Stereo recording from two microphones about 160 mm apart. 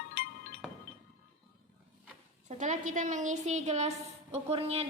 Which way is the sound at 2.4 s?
50° right (ahead or behind).